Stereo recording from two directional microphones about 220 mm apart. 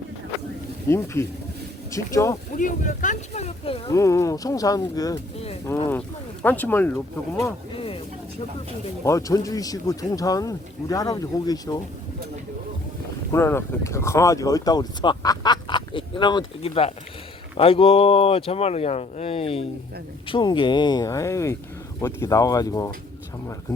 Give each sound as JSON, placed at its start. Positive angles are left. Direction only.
{"t": 0.9, "sound": "speech", "side_deg": 10}
{"t": 2.6, "sound": "speech", "side_deg": 35}
{"t": 3.9, "sound": "speech", "side_deg": 15}
{"t": 9.0, "sound": "speech", "side_deg": 15}
{"t": 13.3, "sound": "speech", "side_deg": 10}